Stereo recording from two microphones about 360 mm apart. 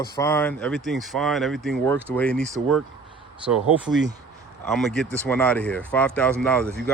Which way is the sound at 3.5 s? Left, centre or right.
Centre.